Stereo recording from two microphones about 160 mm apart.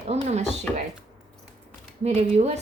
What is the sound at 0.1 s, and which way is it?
Speech, 45° right (ahead or behind).